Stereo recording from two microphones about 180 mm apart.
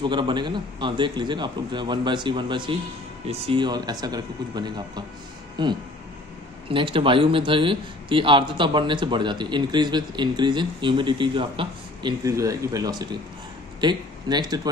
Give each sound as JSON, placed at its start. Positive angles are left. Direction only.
{"t": 0.0, "sound": "a man's voice", "side_deg": -25}